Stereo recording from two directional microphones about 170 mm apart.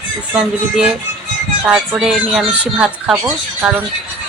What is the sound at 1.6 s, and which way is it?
A woman's voice, 5° right (ahead or behind).